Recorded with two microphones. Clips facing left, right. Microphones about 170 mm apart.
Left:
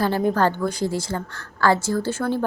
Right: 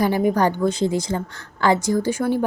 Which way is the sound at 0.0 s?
15° right (ahead or behind).